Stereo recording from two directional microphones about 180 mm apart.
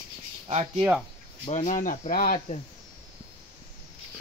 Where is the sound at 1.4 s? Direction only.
40° left (ahead or behind).